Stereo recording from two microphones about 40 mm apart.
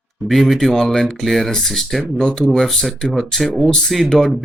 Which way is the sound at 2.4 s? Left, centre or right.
Centre.